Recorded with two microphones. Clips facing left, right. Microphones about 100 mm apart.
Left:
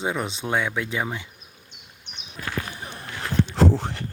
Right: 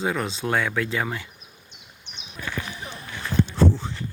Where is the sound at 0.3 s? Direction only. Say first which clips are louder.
Right 1 dB; 20° left (ahead or behind).